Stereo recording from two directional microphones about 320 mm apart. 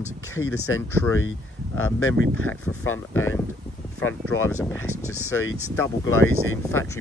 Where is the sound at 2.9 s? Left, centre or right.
Left.